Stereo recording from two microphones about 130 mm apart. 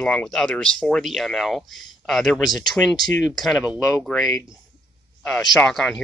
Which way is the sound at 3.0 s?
30° left (ahead or behind).